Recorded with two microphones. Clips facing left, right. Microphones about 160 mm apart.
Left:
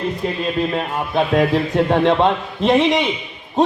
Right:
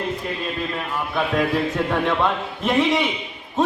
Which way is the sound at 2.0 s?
25° left (ahead or behind).